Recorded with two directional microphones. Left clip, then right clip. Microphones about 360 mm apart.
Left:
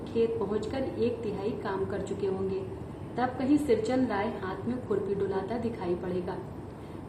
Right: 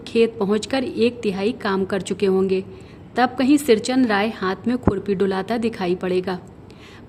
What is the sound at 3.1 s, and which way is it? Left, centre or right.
A woman's voice, right.